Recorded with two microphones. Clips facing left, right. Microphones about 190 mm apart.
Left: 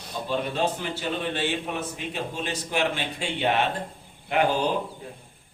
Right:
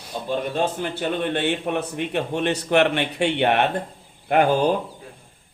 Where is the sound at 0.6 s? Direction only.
55° right (ahead or behind).